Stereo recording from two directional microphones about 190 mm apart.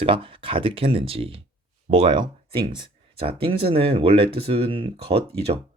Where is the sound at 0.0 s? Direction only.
30° right (ahead or behind).